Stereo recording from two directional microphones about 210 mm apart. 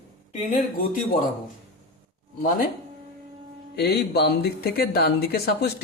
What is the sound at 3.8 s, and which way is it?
Speech, 50° left (ahead or behind).